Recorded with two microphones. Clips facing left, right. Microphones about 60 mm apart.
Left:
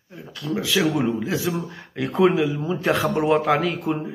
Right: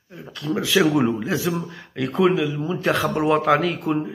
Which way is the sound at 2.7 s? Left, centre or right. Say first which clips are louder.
Even; centre.